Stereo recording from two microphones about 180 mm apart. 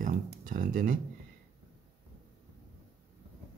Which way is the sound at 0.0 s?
50° right (ahead or behind).